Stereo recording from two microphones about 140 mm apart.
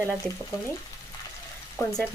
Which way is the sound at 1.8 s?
20° left (ahead or behind).